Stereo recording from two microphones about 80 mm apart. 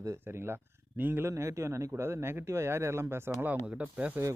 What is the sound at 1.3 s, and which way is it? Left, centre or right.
Speech, right.